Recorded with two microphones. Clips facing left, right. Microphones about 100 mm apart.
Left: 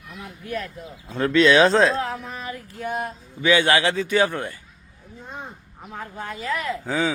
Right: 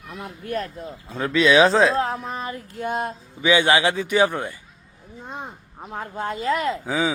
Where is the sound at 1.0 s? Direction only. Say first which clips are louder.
Left 2 dB; 5° right (ahead or behind).